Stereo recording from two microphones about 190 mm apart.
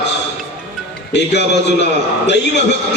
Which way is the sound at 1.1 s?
65° left (ahead or behind).